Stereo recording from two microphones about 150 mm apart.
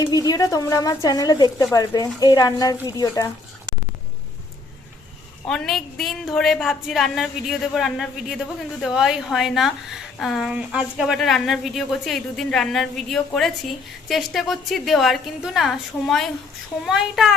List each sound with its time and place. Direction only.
0.0 s a woman's voice: 25° left (ahead or behind)
5.5 s a woman's voice: 5° left (ahead or behind)